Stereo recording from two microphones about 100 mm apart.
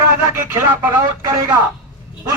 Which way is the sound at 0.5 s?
35° right (ahead or behind).